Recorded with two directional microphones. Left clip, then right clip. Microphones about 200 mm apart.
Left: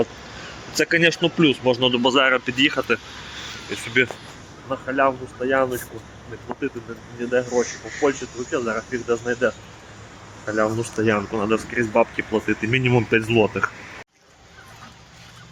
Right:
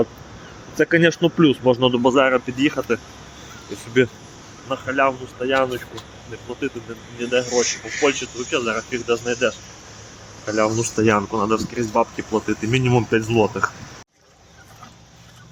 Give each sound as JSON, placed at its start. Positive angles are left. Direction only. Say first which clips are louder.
{"t": 0.9, "sound": "speech", "louder": "right 1 dB", "side_deg": -20}
{"t": 1.9, "sound": "speech", "louder": "right 1 dB", "side_deg": -5}
{"t": 4.0, "sound": "speech", "louder": "right 2 dB", "side_deg": -15}
{"t": 7.2, "sound": "speech", "louder": "right 1 dB", "side_deg": -15}
{"t": 10.4, "sound": "speech", "louder": "right 2 dB", "side_deg": -30}
{"t": 11.0, "sound": "speech", "louder": "right 3 dB", "side_deg": -45}
{"t": 11.3, "sound": "speech", "louder": "right 2 dB", "side_deg": -20}